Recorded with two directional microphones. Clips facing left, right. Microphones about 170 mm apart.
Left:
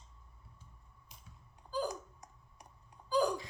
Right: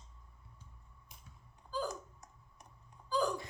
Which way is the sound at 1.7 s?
15° left (ahead or behind).